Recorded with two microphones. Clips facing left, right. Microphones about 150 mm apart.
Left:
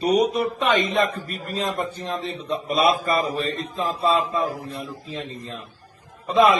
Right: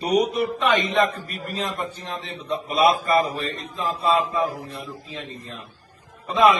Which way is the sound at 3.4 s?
35° left (ahead or behind).